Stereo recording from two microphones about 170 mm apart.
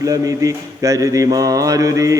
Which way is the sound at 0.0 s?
20° right (ahead or behind).